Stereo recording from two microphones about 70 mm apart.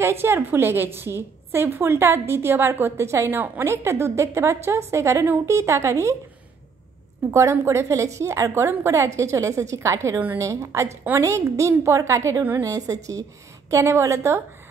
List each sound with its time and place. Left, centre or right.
0.0 s a woman's voice: right
3.3 s a woman's voice: right
3.6 s a woman's voice: right
7.2 s a woman's voice: right
13.7 s a woman's voice: right